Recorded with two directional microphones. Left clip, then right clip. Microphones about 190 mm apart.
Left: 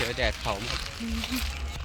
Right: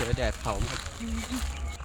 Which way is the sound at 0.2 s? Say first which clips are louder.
Left 2 dB; 55° right (ahead or behind).